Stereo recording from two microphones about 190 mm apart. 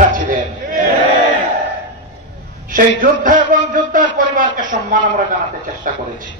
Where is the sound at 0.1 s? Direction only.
50° right (ahead or behind).